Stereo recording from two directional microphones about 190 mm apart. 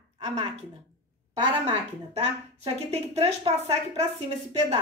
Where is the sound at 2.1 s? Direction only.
35° right (ahead or behind).